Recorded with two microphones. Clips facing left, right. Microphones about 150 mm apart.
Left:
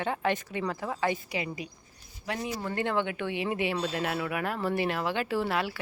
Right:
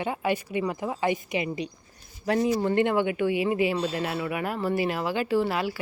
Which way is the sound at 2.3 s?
35° right (ahead or behind).